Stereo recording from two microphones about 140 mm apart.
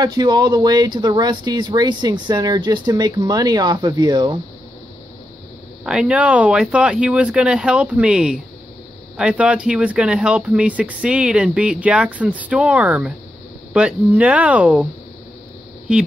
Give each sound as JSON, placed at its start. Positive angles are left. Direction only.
{"t": 0.0, "sound": "speech", "side_deg": -30}
{"t": 5.9, "sound": "speech", "side_deg": -5}
{"t": 15.9, "sound": "speech", "side_deg": -10}